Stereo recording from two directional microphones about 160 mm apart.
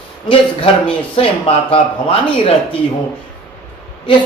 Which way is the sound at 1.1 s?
35° left (ahead or behind).